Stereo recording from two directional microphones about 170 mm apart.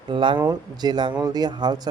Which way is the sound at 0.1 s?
30° right (ahead or behind).